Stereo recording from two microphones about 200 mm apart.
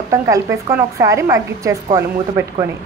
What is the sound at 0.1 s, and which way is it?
A woman's voice, 15° right (ahead or behind).